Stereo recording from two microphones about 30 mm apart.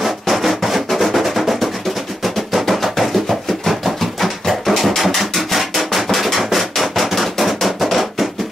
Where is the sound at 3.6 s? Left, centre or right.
Centre.